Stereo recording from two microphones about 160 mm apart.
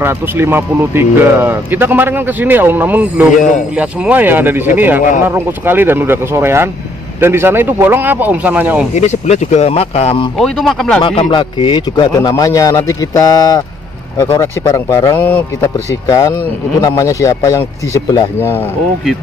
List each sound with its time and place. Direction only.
0.0 s speech: 15° right (ahead or behind)
8.9 s speech: 45° left (ahead or behind)
10.3 s speech: centre (ahead or behind)
11.0 s speech: 30° left (ahead or behind)